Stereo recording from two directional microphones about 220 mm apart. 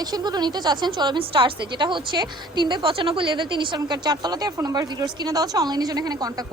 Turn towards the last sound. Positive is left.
turn(degrees=-15)  # may be behind; listen again after turning